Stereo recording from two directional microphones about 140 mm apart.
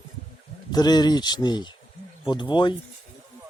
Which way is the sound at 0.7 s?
30° left (ahead or behind).